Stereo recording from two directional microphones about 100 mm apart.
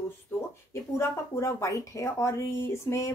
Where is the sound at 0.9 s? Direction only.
30° left (ahead or behind).